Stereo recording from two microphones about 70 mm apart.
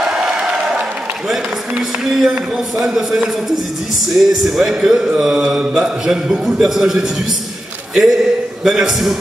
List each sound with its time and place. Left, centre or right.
1.3 s speech: centre
4.1 s music: centre
7.9 s a man's voice: centre
8.6 s music: centre